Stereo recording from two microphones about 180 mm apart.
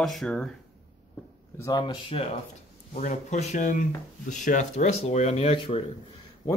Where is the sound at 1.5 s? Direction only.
20° left (ahead or behind).